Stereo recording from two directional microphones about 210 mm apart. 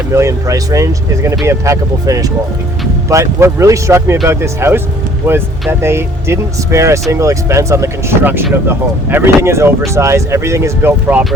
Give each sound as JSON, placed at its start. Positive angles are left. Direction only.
{"t": 0.1, "sound": "speech", "side_deg": -15}